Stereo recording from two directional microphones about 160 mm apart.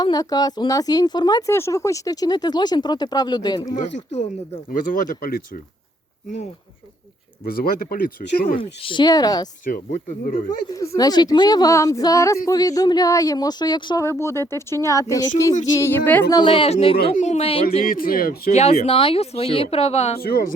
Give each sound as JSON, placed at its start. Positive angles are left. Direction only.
{"t": 0.0, "sound": "speech", "side_deg": 25}
{"t": 3.8, "sound": "speech", "side_deg": 45}
{"t": 7.4, "sound": "speech", "side_deg": 70}
{"t": 8.5, "sound": "speech", "side_deg": 30}
{"t": 9.6, "sound": "speech", "side_deg": 55}
{"t": 10.8, "sound": "speech", "side_deg": 25}
{"t": 14.0, "sound": "speech", "side_deg": 15}
{"t": 16.3, "sound": "speech", "side_deg": 30}
{"t": 17.8, "sound": "speech", "side_deg": 65}
{"t": 18.5, "sound": "speech", "side_deg": 40}